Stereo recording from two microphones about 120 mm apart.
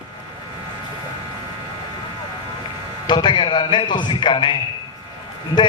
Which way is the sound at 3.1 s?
40° left (ahead or behind).